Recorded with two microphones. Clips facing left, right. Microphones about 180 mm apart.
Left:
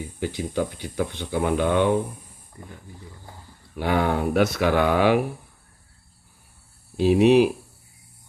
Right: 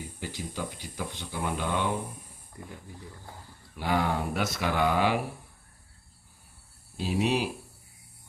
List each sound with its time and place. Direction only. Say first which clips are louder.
0.2 s speech: left 11 dB; 60° left (ahead or behind)
3.8 s speech: left 5 dB; 65° left (ahead or behind)
6.9 s speech: left 12 dB; 70° left (ahead or behind)